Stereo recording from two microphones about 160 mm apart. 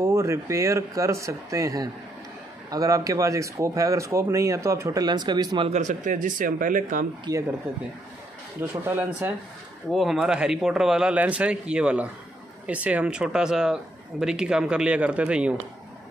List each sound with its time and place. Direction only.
0.0 s speech: 15° right (ahead or behind)
5.7 s speech: 50° right (ahead or behind)
7.3 s speech: 25° right (ahead or behind)
8.5 s speech: 15° right (ahead or behind)
9.8 s speech: centre (ahead or behind)